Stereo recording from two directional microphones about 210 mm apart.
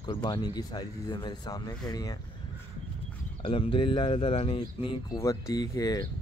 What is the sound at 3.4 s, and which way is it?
Speech, 25° left (ahead or behind).